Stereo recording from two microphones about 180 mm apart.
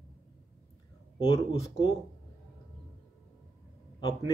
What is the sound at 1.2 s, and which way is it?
Speech, 30° left (ahead or behind).